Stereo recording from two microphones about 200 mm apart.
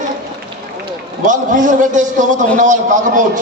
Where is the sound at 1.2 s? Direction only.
40° right (ahead or behind).